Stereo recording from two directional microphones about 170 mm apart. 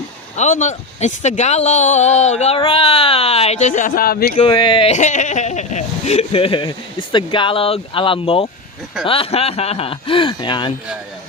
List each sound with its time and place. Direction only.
0.3 s speech: 45° left (ahead or behind); by 4.4 s 65° left (ahead or behind)
4.4 s speech: 30° left (ahead or behind)